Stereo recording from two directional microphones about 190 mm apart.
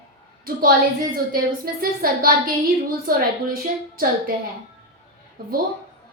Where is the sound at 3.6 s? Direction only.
50° right (ahead or behind).